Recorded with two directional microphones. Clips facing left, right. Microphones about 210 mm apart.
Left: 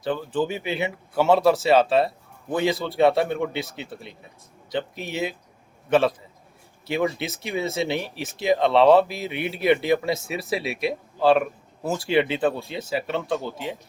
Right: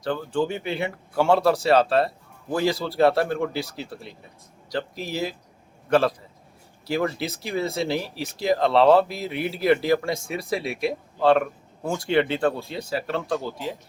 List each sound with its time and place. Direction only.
0.0 s a man's voice: 5° left (ahead or behind)
7.2 s a man's voice: centre (ahead or behind)